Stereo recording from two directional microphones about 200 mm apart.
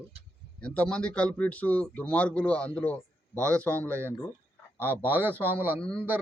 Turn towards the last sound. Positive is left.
turn(degrees=5)  # may be behind; listen again after turning